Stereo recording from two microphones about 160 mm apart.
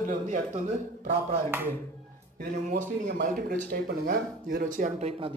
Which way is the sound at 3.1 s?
70° right (ahead or behind).